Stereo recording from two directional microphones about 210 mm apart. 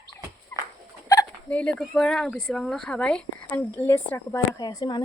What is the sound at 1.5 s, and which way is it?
Speech, 5° left (ahead or behind).